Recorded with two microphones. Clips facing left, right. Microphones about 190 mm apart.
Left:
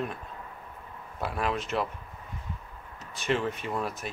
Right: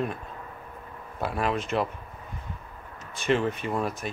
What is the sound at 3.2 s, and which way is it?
Speech, centre (ahead or behind).